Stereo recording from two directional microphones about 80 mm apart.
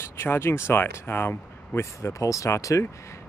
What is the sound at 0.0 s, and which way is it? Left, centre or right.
A man's voice, left.